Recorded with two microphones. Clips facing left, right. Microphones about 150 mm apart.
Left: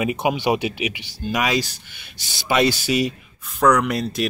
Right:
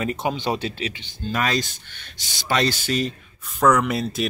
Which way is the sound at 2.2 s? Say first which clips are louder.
Left 2 dB; 15° right (ahead or behind).